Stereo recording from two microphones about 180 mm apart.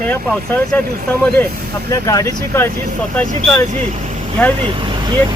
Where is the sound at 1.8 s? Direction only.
15° left (ahead or behind).